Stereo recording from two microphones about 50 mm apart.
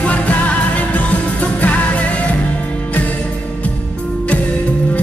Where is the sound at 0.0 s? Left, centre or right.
Left.